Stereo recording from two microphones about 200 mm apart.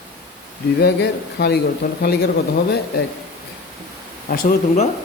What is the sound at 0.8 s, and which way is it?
Speech, 55° left (ahead or behind).